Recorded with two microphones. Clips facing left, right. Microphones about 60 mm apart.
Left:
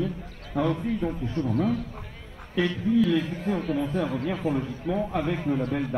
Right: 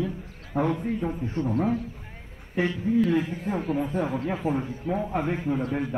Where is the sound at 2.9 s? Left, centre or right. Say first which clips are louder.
Even; right.